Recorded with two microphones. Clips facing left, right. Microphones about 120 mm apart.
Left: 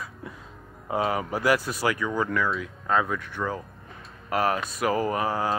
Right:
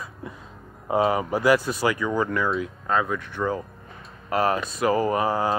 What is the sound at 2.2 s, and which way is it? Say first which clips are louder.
Speech: right 1 dB; 10° right (ahead or behind).